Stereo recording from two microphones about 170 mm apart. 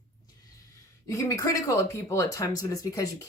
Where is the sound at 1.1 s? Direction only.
15° left (ahead or behind).